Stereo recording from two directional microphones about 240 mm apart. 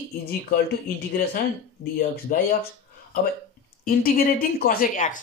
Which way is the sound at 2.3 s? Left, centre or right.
Left.